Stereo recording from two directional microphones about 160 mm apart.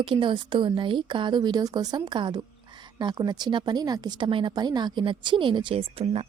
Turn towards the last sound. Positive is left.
turn(degrees=-40)  # may be behind; listen again after turning